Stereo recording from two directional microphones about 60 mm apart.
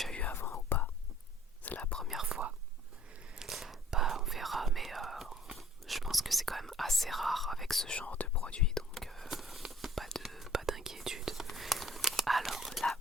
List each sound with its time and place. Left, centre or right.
0.1 s whispering: left
0.3 s whispering: left
1.6 s whispering: left
2.2 s whispering: centre
3.3 s whispering: centre
7.9 s whispering: left; by 13.0 s centre